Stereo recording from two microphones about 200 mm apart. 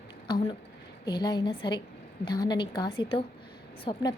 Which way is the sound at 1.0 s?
20° left (ahead or behind).